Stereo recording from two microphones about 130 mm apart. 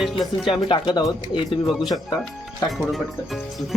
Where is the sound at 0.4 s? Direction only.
35° left (ahead or behind).